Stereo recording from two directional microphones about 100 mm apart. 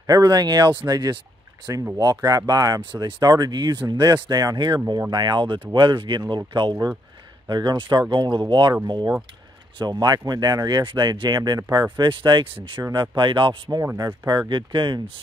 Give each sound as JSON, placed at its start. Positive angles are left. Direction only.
{"t": 0.0, "sound": "speech", "side_deg": -40}
{"t": 13.9, "sound": "speech", "side_deg": -40}